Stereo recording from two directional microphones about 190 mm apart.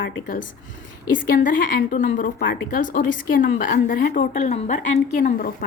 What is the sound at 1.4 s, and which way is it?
A woman's voice, 45° left (ahead or behind).